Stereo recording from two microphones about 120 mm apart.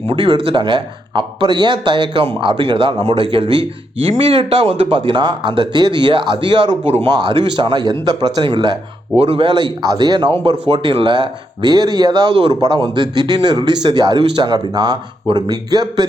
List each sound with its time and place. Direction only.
0.1 s speech: 45° right (ahead or behind)
6.8 s a man's voice: 60° right (ahead or behind)
7.1 s a man's voice: 40° right (ahead or behind)
9.1 s a man's voice: 50° right (ahead or behind); by 12.3 s 35° right (ahead or behind)
12.3 s a man's voice: 45° right (ahead or behind)